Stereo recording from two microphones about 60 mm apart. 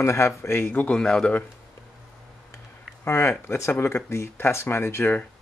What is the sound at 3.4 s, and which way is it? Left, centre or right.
Speech, left.